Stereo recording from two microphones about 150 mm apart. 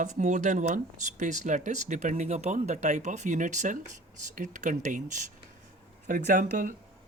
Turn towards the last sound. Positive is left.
turn(degrees=-60)  # may be behind; listen again after turning